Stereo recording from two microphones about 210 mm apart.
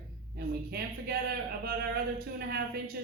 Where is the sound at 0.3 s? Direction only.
50° right (ahead or behind).